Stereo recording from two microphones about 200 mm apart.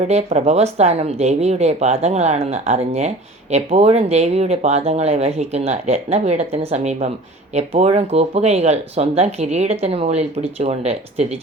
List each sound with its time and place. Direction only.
0.0 s speech: 35° right (ahead or behind)